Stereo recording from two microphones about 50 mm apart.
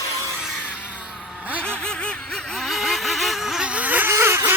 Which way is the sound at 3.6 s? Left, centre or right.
Right.